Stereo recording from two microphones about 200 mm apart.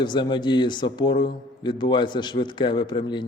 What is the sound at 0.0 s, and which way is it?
Speech, 20° left (ahead or behind).